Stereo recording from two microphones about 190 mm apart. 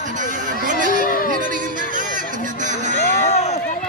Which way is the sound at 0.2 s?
40° right (ahead or behind).